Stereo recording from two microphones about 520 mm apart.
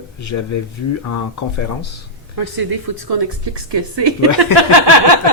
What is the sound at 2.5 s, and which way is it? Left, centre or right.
A woman's voice, right.